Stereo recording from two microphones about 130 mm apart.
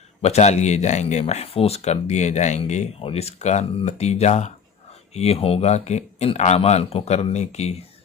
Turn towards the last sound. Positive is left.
turn(degrees=55)  # may be behind; listen again after turning